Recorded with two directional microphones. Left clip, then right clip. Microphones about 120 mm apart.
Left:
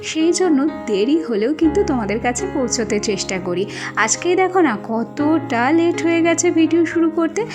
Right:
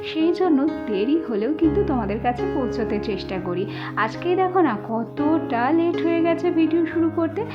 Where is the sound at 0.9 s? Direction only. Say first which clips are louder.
Left 7 dB; 35° right (ahead or behind).